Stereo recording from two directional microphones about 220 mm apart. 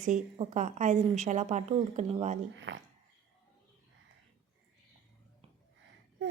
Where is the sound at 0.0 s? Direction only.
35° right (ahead or behind).